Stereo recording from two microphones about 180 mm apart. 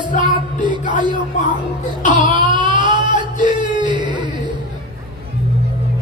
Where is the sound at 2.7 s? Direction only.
25° right (ahead or behind).